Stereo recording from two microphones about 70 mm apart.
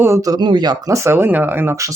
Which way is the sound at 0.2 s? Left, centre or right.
Right.